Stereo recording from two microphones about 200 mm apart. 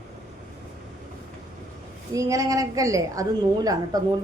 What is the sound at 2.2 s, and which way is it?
A woman's voice, 15° right (ahead or behind).